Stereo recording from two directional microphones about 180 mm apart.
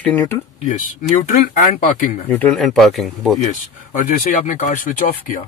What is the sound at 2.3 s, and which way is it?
Speech, 5° left (ahead or behind).